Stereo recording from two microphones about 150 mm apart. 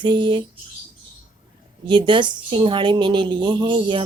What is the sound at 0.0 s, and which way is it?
Speech, 30° right (ahead or behind).